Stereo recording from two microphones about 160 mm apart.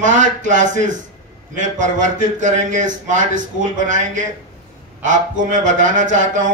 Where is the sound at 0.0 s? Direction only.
50° right (ahead or behind).